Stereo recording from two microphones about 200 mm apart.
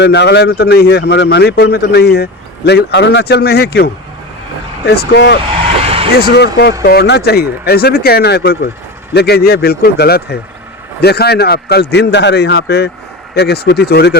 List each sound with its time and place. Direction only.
0.0 s a man's voice: 60° left (ahead or behind)
5.8 s vehicle: 30° right (ahead or behind)
6.3 s a man's voice: 55° left (ahead or behind)